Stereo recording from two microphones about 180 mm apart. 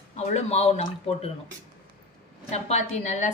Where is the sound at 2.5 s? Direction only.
40° left (ahead or behind).